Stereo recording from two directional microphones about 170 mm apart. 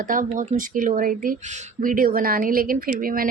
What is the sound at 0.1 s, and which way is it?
Speech, 50° right (ahead or behind).